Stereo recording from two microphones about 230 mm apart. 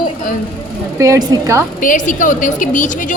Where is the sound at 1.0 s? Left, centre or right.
Centre.